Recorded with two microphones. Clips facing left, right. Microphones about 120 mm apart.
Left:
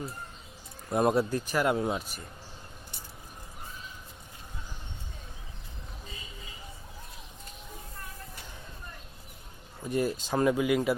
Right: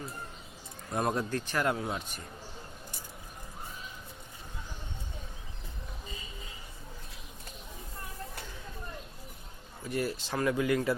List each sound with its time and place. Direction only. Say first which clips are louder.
0.9 s a man's voice: left 5 dB; 10° left (ahead or behind)
9.8 s speech: left 4 dB; 20° left (ahead or behind)